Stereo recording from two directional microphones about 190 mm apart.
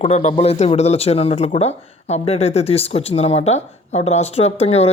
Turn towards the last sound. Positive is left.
turn(degrees=35)  # may be behind; listen again after turning